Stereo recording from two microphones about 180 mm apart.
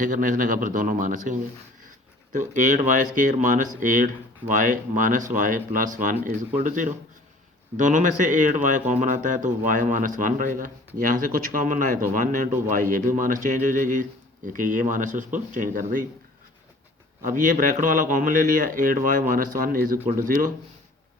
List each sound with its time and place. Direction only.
0.0 s a man's voice: 50° right (ahead or behind)
17.2 s a man's voice: 50° right (ahead or behind)